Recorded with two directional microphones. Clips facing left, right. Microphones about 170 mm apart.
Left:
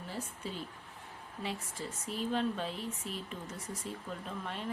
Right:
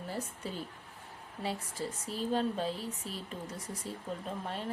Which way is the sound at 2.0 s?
35° right (ahead or behind).